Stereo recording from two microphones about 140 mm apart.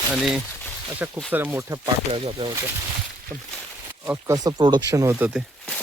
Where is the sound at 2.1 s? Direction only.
40° right (ahead or behind).